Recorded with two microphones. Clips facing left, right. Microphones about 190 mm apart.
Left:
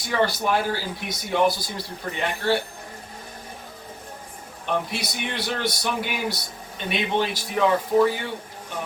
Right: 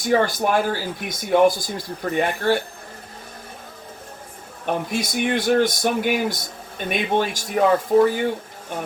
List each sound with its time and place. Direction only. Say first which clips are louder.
0.0 s speech: right 4 dB; 50° right (ahead or behind)
4.6 s speech: right 3 dB; 50° right (ahead or behind)